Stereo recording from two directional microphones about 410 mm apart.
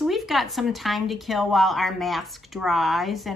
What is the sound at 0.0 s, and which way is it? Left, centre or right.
Speech, centre.